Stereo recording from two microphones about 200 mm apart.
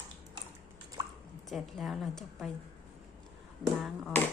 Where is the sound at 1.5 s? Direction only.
Centre (ahead or behind).